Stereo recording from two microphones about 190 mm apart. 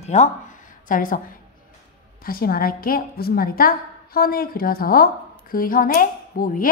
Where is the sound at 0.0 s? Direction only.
35° left (ahead or behind).